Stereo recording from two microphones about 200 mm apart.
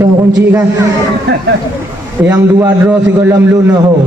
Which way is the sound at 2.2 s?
15° right (ahead or behind).